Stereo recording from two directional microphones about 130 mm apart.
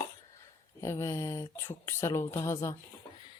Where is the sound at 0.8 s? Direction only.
20° left (ahead or behind).